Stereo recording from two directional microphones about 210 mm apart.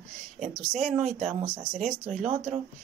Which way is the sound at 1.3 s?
20° right (ahead or behind).